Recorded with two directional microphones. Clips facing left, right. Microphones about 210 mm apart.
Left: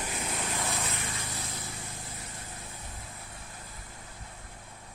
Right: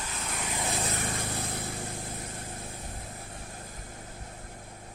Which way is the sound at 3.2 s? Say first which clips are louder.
Right 4 dB; 45° right (ahead or behind).